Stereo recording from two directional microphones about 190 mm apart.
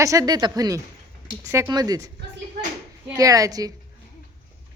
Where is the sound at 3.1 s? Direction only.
20° right (ahead or behind).